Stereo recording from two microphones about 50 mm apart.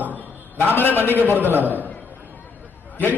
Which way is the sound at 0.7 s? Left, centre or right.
Left.